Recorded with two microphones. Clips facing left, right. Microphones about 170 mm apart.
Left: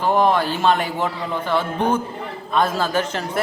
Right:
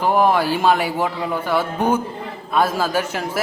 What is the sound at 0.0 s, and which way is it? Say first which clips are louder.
Speech: right 1 dB; 10° right (ahead or behind).